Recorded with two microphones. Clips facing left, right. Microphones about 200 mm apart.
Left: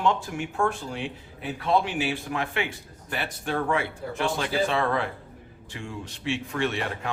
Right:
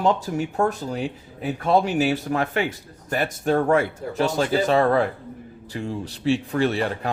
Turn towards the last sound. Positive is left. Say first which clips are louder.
# right 6 dB
turn(degrees=-35)  # may be behind; listen again after turning